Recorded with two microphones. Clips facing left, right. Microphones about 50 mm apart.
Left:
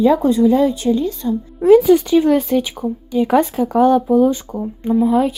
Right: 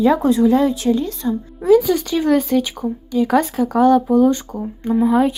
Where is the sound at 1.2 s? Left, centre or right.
Right.